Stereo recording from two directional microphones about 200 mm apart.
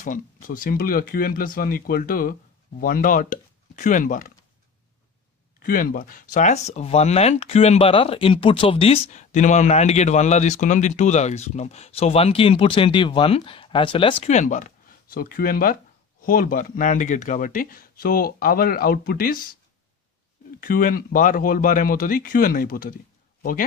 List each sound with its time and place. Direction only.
0.0 s speech: 40° left (ahead or behind)
5.6 s speech: 45° left (ahead or behind)
20.6 s speech: 45° left (ahead or behind)